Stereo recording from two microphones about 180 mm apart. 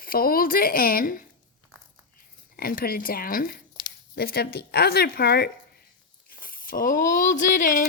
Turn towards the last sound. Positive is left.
turn(degrees=50)  # may be behind; listen again after turning